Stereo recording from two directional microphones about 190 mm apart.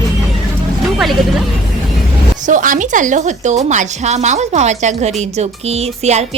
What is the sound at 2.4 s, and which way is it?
A woman's voice, 45° right (ahead or behind).